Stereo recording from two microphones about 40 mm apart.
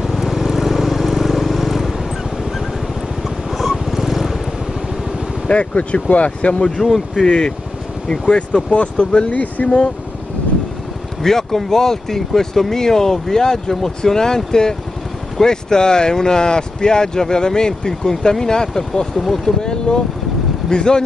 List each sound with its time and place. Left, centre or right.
0.0 s vehicle: centre
3.4 s vehicle: centre
5.5 s speech: left
6.8 s speech: centre
7.2 s speech: centre
8.6 s speech: left
11.2 s speech: centre
19.6 s speech: centre